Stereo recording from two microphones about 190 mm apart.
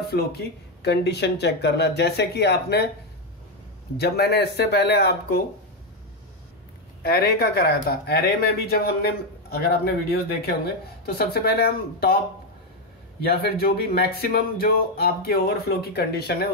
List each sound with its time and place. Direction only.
0.0 s speech: 55° left (ahead or behind)
3.9 s speech: 55° left (ahead or behind)
7.0 s speech: 55° left (ahead or behind)
13.2 s speech: 55° left (ahead or behind)